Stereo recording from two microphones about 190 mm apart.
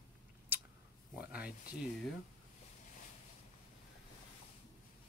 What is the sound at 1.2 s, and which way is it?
Speech, 5° right (ahead or behind).